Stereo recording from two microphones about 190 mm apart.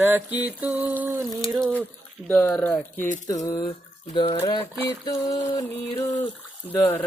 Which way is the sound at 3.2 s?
20° left (ahead or behind).